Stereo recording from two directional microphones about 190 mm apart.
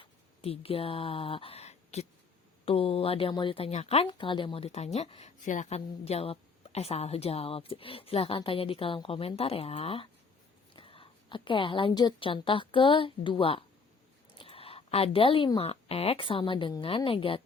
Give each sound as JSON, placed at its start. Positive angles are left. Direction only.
{"t": 0.0, "sound": "a woman's voice", "side_deg": 30}